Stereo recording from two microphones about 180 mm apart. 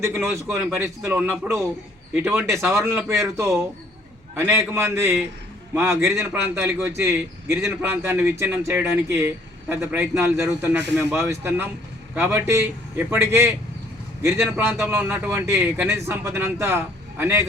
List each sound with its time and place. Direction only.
0.0 s a man's voice: 15° right (ahead or behind)